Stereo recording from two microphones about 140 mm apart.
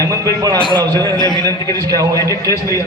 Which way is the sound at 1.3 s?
25° right (ahead or behind).